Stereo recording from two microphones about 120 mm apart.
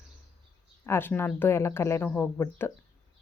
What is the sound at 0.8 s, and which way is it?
A woman's voice, 20° left (ahead or behind).